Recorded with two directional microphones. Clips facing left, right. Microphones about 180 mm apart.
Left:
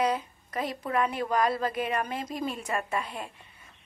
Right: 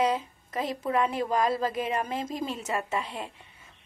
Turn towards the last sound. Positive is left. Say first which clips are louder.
# right 1 dB
turn(degrees=-25)  # may be behind; listen again after turning